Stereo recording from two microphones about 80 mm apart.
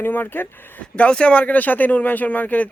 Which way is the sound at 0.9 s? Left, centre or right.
Centre.